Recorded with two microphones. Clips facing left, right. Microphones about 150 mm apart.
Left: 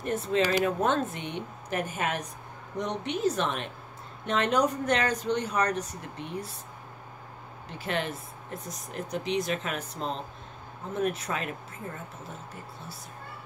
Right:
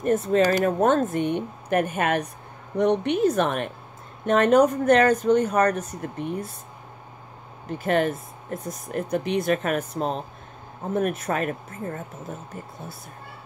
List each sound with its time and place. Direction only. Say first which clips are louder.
0.0 s a woman's voice: right 7 dB; 45° right (ahead or behind)
7.8 s speech: right 9 dB; 50° right (ahead or behind)